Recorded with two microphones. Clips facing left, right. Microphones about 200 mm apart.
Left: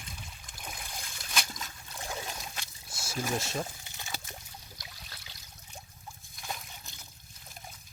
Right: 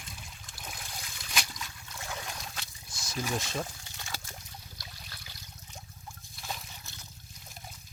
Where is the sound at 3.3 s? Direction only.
5° left (ahead or behind).